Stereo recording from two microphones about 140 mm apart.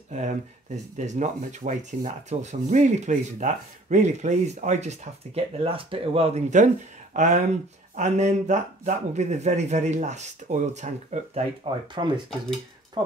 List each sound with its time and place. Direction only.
0.9 s speech: 60° right (ahead or behind)
11.6 s speech: 40° right (ahead or behind)
13.0 s a sound: 30° right (ahead or behind)